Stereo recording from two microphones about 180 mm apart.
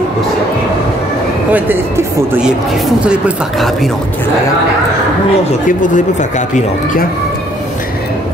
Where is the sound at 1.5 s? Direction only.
10° right (ahead or behind).